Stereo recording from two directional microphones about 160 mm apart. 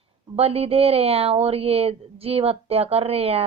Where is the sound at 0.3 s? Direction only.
40° right (ahead or behind).